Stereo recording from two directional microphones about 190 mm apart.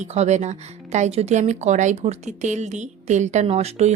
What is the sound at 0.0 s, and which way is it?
Speech, 35° right (ahead or behind).